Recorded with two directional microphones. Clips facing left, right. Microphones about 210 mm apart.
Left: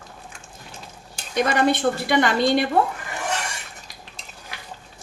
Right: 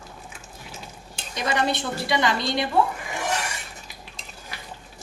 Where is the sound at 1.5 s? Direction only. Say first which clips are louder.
Left 4 dB; 55° left (ahead or behind).